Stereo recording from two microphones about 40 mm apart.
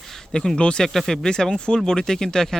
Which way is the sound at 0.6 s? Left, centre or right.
Left.